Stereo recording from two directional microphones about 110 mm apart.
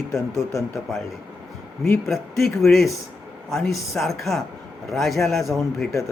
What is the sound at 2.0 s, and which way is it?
Speech, centre (ahead or behind).